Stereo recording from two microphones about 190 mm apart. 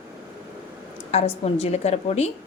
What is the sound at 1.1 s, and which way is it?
A woman's voice, 35° left (ahead or behind).